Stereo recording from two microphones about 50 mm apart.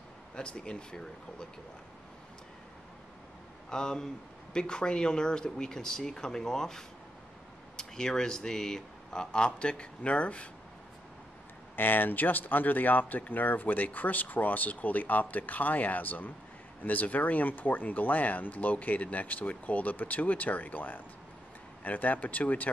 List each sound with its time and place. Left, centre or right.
0.4 s speech: centre
3.7 s speech: centre
11.7 s speech: left